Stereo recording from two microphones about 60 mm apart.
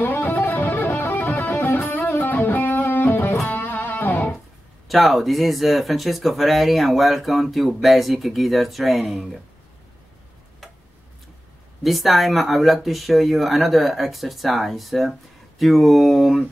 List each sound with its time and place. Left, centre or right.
0.0 s music: left
4.8 s speech: centre
11.8 s speech: centre